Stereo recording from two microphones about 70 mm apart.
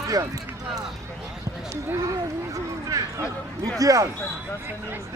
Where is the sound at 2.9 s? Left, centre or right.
Right.